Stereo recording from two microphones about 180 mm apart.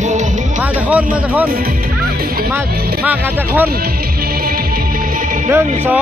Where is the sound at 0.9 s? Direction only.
10° right (ahead or behind).